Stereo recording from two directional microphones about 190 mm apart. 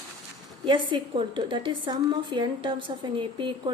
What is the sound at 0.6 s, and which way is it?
A woman's voice, 25° right (ahead or behind).